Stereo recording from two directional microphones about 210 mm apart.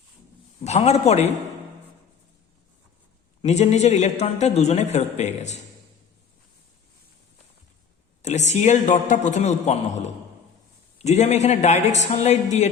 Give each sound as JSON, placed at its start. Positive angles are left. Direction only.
{"t": 0.6, "sound": "a man's voice", "side_deg": 30}
{"t": 3.4, "sound": "a man's voice", "side_deg": 30}
{"t": 8.2, "sound": "a man's voice", "side_deg": 35}